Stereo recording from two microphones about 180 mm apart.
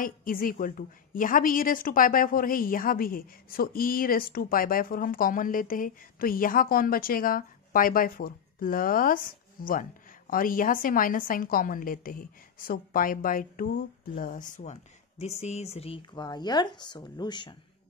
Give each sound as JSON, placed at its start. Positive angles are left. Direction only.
{"t": 0.0, "sound": "a woman's voice", "side_deg": 50}